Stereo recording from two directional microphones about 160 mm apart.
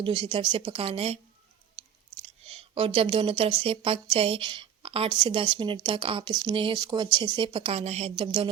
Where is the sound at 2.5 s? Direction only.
35° right (ahead or behind).